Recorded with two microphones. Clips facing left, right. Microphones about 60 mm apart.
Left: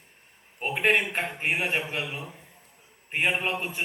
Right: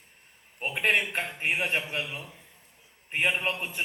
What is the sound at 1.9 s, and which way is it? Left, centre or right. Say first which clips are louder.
Speech: left 1 dB; left.